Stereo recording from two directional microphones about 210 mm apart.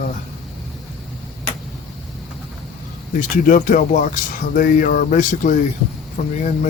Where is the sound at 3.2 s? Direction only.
40° left (ahead or behind).